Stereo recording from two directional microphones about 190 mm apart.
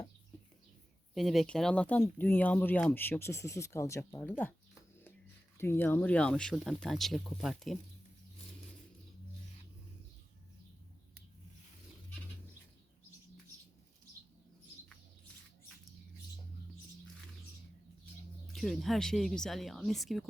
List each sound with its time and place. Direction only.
1.1 s speech: centre (ahead or behind)
5.5 s speech: 10° left (ahead or behind)
18.5 s speech: centre (ahead or behind)